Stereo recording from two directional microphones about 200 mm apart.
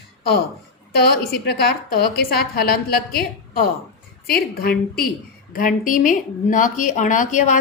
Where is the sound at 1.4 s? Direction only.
55° left (ahead or behind).